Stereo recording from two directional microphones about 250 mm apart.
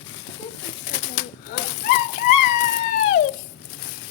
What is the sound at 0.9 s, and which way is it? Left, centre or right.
Bird, left.